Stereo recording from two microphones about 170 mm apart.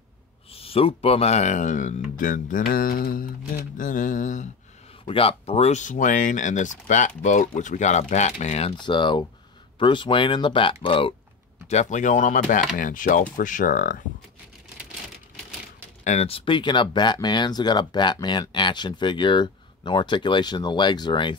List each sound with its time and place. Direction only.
0.5 s speech: 35° left (ahead or behind)
5.0 s speech: 35° left (ahead or behind)
11.6 s speech: 40° left (ahead or behind)
16.0 s speech: 40° left (ahead or behind)